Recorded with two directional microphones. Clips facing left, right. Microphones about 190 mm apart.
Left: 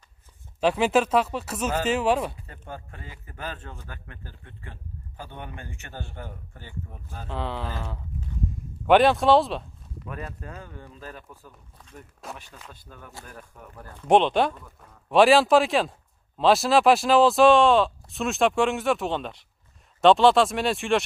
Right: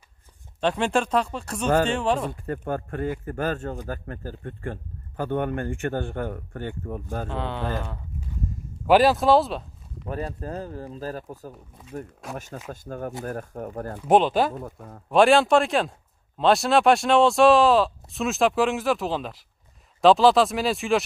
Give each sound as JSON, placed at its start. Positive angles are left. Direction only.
{"t": 0.6, "sound": "speech", "side_deg": 5}
{"t": 2.3, "sound": "a man's voice", "side_deg": -55}
{"t": 7.2, "sound": "speech", "side_deg": 0}
{"t": 10.0, "sound": "a man's voice", "side_deg": -35}
{"t": 13.7, "sound": "speech", "side_deg": -60}
{"t": 14.0, "sound": "speech", "side_deg": -5}
{"t": 14.5, "sound": "a man's voice", "side_deg": -50}
{"t": 15.0, "sound": "speech", "side_deg": 0}